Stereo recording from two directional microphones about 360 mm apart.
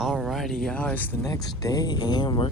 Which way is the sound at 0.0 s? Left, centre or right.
Centre.